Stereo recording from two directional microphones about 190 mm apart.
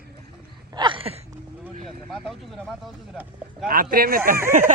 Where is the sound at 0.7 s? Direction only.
25° right (ahead or behind).